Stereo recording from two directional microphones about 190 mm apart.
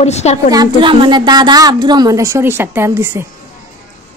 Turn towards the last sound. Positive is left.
turn(degrees=-15)  # may be behind; listen again after turning